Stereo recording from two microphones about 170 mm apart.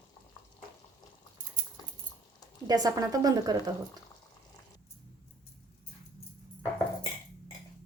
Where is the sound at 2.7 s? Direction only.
20° right (ahead or behind).